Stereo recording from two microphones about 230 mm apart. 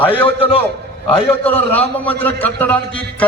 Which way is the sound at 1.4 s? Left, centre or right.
Centre.